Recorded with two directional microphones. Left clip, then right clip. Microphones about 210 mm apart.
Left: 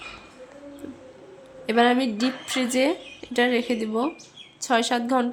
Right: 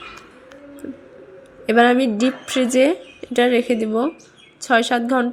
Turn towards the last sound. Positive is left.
turn(degrees=-10)  # may be behind; listen again after turning